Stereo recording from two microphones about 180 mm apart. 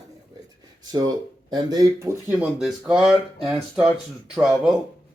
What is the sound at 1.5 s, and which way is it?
Speech, 20° right (ahead or behind).